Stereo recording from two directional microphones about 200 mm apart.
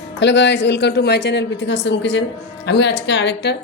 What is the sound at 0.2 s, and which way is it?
Speech, 60° left (ahead or behind).